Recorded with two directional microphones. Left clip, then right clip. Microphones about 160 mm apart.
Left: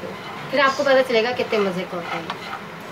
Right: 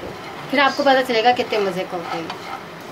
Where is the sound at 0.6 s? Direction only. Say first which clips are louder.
Right 1 dB; 60° right (ahead or behind).